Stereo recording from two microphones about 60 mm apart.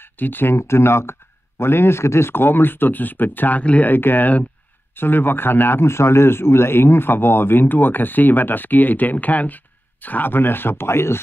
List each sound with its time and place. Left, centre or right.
0.0 s speech: left